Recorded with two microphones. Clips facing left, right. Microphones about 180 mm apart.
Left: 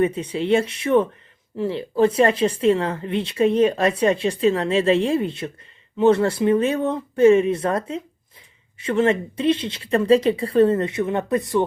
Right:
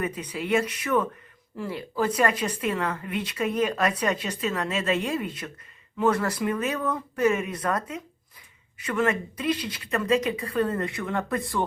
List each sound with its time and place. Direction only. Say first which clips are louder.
0.0 s speech: left 9 dB; 25° left (ahead or behind)